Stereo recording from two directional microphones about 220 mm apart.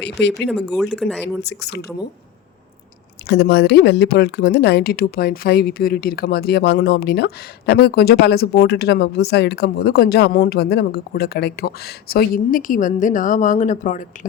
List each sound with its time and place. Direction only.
0.0 s a woman's voice: 50° left (ahead or behind)
0.4 s speech: centre (ahead or behind)
1.5 s a woman's voice: 50° left (ahead or behind)
3.2 s a woman's voice: 50° left (ahead or behind)